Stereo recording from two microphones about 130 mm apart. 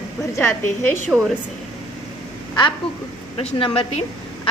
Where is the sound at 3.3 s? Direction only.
45° left (ahead or behind).